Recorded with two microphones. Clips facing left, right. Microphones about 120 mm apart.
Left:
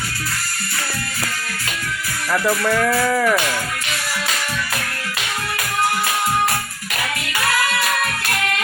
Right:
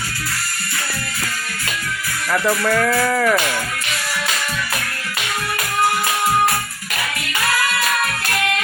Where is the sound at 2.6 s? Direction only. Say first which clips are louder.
Even; 5° left (ahead or behind).